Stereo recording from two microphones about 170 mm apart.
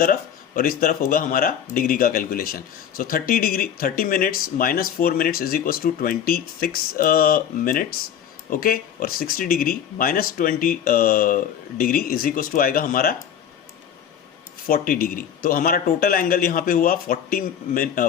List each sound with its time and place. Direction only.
0.0 s speech: 55° left (ahead or behind)
14.7 s speech: 60° left (ahead or behind)